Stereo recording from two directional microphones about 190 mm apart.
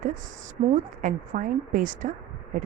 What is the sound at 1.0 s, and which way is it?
A woman's voice, 45° right (ahead or behind).